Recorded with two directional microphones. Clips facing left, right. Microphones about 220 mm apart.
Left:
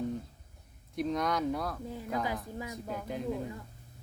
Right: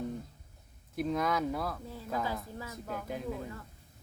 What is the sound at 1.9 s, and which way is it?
Speech, 15° left (ahead or behind).